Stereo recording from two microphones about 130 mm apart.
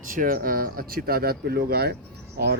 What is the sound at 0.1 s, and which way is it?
Speech, 90° right.